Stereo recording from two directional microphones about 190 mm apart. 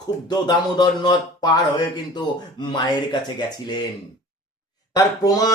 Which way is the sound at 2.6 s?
25° left (ahead or behind).